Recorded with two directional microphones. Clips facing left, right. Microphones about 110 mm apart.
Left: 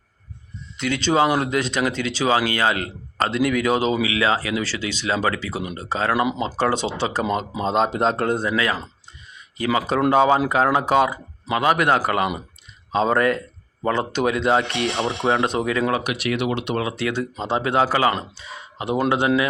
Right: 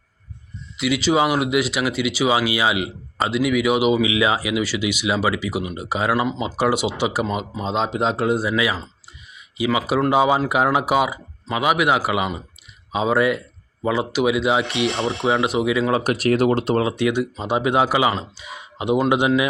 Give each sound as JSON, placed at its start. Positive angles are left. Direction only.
{"t": 0.8, "sound": "speech", "side_deg": -5}
{"t": 7.6, "sound": "speech", "side_deg": 0}
{"t": 16.0, "sound": "speech", "side_deg": -40}
{"t": 16.9, "sound": "speech", "side_deg": -15}